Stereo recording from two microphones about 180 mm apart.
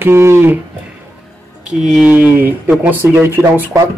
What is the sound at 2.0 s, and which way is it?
Speech, 10° right (ahead or behind).